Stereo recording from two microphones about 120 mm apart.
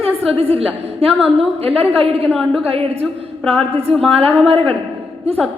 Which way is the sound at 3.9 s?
50° right (ahead or behind).